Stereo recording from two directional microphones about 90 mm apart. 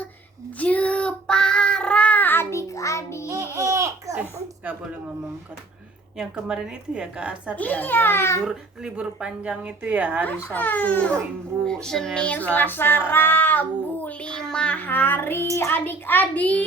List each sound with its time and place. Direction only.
0.6 s child singing: 15° left (ahead or behind); by 3.2 s 35° left (ahead or behind)
3.2 s baby laughter: 35° right (ahead or behind)
4.2 s a sound: 20° right (ahead or behind)
6.1 s speech: 10° right (ahead or behind)
7.5 s female singing: 20° left (ahead or behind)
8.4 s speech: 10° right (ahead or behind)
10.5 s female singing: 20° left (ahead or behind)
11.6 s female singing: 5° left (ahead or behind)